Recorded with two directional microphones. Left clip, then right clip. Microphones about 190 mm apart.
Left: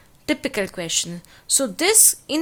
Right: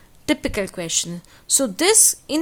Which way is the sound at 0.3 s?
15° right (ahead or behind).